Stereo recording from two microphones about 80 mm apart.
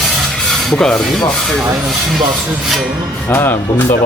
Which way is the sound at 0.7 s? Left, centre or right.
Centre.